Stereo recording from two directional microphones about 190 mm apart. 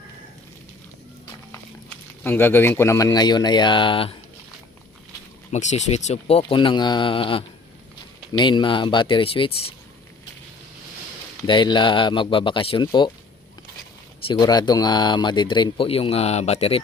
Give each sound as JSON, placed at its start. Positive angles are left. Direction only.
{"t": 2.2, "sound": "speech", "side_deg": 10}
{"t": 5.5, "sound": "speech", "side_deg": 35}
{"t": 11.4, "sound": "speech", "side_deg": 25}
{"t": 14.3, "sound": "speech", "side_deg": 20}